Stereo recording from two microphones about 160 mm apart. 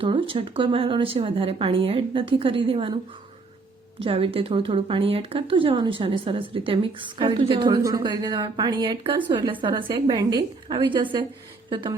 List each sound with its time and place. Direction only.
0.0 s speech: 35° right (ahead or behind)
4.0 s a woman's voice: 35° right (ahead or behind)